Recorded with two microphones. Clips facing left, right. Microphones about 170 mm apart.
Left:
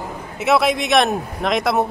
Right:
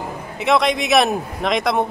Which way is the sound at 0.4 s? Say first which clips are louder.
Even; 5° left (ahead or behind).